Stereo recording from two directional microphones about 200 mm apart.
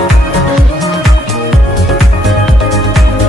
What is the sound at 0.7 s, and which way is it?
Music, centre (ahead or behind).